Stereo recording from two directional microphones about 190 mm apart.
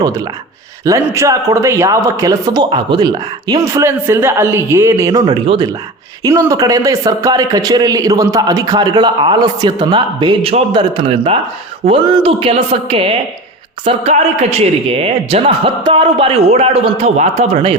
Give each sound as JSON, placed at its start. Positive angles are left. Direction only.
{"t": 0.9, "sound": "a man's voice", "side_deg": -15}